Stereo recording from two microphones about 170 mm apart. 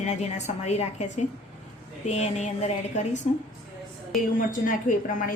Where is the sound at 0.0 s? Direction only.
40° left (ahead or behind).